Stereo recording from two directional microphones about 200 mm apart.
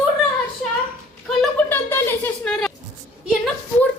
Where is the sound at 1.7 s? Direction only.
10° left (ahead or behind).